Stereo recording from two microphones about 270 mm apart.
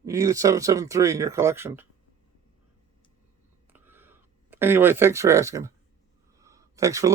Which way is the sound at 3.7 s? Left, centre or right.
Centre.